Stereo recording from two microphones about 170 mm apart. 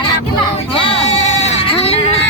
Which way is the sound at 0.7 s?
35° left (ahead or behind).